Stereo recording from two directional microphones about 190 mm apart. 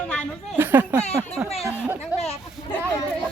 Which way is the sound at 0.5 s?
10° right (ahead or behind).